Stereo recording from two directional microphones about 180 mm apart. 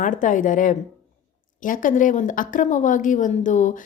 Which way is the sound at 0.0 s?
45° left (ahead or behind).